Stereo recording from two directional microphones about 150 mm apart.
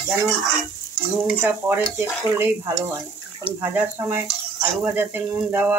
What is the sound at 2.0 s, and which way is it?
Speech, 15° right (ahead or behind).